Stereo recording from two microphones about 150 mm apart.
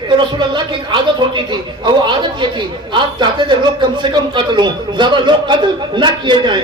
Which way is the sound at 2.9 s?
30° right (ahead or behind).